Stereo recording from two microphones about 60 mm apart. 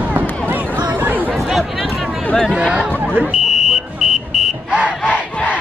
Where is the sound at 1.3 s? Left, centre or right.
Centre.